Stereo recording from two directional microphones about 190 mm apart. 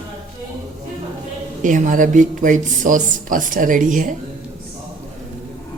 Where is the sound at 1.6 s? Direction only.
40° right (ahead or behind).